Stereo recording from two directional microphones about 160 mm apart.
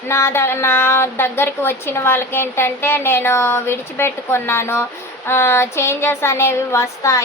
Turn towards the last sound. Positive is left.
turn(degrees=20)  # may be behind; listen again after turning